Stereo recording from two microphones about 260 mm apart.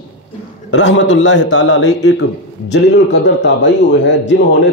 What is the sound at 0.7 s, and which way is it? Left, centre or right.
A man's voice, left.